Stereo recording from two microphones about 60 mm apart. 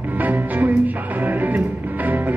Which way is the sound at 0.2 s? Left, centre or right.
Right.